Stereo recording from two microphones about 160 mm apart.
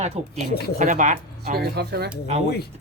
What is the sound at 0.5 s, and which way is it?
Speech, 80° left.